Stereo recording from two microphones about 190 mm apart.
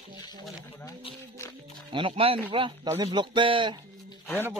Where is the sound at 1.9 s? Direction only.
30° right (ahead or behind).